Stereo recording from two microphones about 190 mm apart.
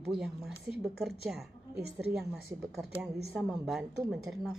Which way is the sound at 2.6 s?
Centre (ahead or behind).